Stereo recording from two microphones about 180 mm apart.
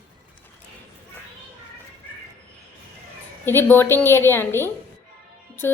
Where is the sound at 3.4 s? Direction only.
10° left (ahead or behind).